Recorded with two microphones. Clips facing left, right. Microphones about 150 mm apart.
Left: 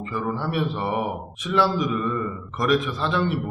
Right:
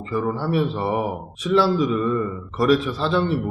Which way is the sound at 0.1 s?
30° right (ahead or behind).